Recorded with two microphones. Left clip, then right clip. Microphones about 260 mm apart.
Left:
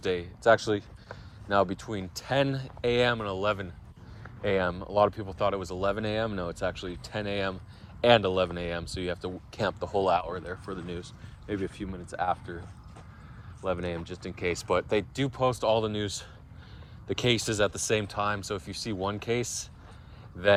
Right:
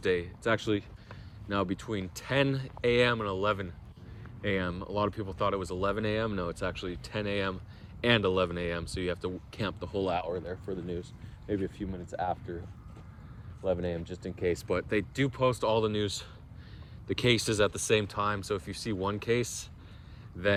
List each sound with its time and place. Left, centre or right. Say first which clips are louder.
0.0 s speech: left 3 dB; centre
10.7 s speech: right 1 dB; centre
13.8 s speech: even; centre
14.8 s speech: left 2 dB; centre